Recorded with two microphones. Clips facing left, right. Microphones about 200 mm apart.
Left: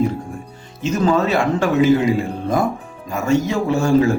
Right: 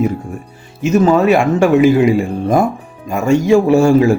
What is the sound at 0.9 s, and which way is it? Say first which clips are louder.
A man's voice: right 6 dB; 15° right (ahead or behind).